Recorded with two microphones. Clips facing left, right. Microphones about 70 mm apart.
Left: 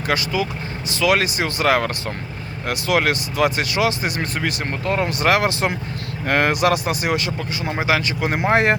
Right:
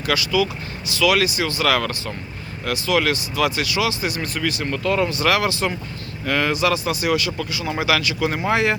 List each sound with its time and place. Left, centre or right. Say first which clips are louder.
0.1 s speech: right 2 dB; left